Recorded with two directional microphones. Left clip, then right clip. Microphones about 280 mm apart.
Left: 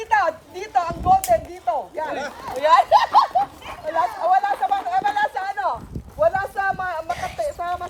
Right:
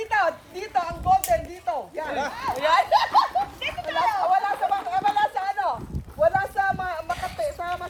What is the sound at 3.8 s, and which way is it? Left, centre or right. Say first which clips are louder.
Chatter: left 3 dB; left.